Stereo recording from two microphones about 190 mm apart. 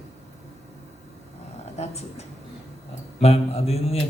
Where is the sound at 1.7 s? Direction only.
35° left (ahead or behind).